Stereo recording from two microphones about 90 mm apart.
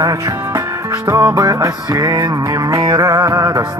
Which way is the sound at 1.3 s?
40° right (ahead or behind).